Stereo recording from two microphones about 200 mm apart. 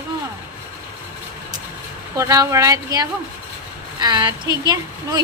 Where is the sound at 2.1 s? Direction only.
15° right (ahead or behind).